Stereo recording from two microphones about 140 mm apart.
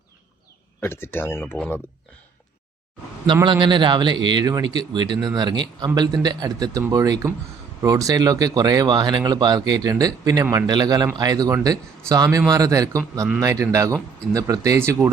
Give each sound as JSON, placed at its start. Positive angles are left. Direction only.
{"t": 0.8, "sound": "speech", "side_deg": 15}
{"t": 3.4, "sound": "speech", "side_deg": -35}